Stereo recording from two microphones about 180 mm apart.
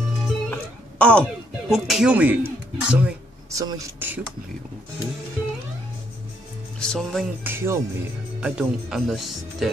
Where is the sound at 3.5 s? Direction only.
20° right (ahead or behind).